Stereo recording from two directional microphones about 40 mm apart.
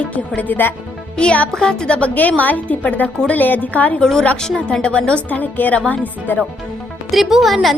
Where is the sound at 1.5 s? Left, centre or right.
Centre.